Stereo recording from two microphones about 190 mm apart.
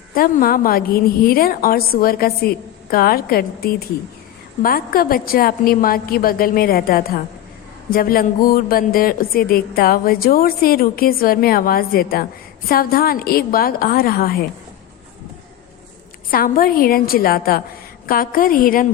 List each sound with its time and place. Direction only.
0.1 s a woman's voice: 50° left (ahead or behind)
16.3 s a woman's voice: 50° left (ahead or behind)